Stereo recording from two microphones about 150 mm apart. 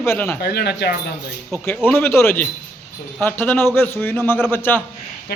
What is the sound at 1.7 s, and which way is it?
A man's voice, 15° left (ahead or behind).